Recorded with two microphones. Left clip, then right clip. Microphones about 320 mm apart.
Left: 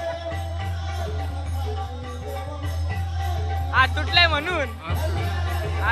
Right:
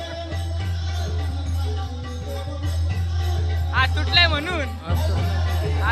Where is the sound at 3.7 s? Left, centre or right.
Centre.